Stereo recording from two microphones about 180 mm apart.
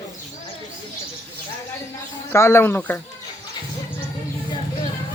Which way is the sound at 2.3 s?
15° left (ahead or behind).